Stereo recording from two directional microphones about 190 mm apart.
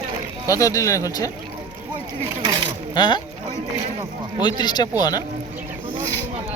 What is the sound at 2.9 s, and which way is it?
Speech, 25° left (ahead or behind).